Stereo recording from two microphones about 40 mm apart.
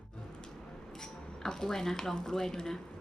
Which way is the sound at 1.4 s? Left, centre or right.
Centre.